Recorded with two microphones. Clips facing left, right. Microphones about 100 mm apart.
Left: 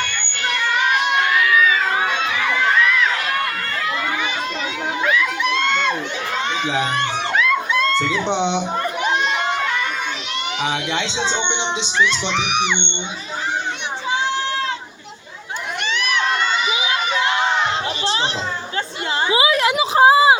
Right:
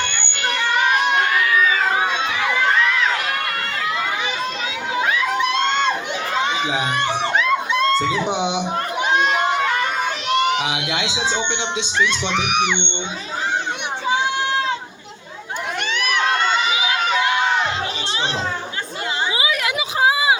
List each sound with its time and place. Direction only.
0.0 s crowd: 25° right (ahead or behind)
5.0 s crowd: 25° right (ahead or behind)
7.3 s a sound: 30° right (ahead or behind)
8.3 s speech: 10° right (ahead or behind)
10.6 s speech: 10° right (ahead or behind)
12.3 s speech: 50° right (ahead or behind)
16.0 s crowd: 50° right (ahead or behind)
17.2 s crowd: 30° left (ahead or behind)
19.3 s a sound: 25° left (ahead or behind)